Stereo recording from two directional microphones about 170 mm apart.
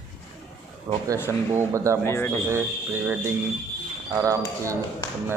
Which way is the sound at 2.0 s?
15° left (ahead or behind).